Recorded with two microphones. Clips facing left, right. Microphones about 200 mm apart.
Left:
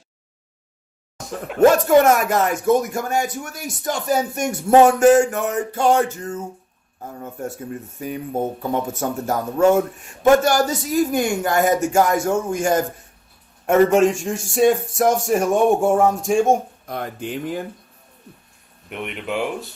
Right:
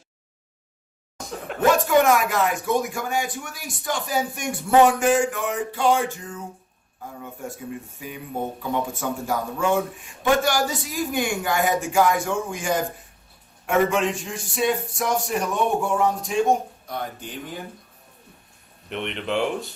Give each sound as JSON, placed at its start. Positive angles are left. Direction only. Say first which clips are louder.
{"t": 1.7, "sound": "speech", "louder": "left 4 dB", "side_deg": 45}
{"t": 18.9, "sound": "speech", "louder": "even", "side_deg": 5}